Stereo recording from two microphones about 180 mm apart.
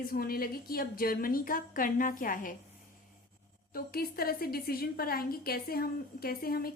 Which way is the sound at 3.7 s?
55° left (ahead or behind).